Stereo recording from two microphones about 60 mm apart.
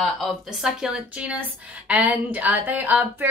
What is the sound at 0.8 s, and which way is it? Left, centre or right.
Speech, centre.